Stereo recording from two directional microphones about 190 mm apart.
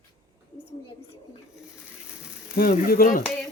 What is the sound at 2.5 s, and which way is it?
Speech, 50° left (ahead or behind).